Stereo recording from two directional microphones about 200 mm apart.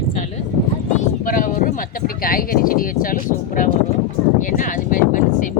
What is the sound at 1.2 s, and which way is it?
Speech, 40° left (ahead or behind).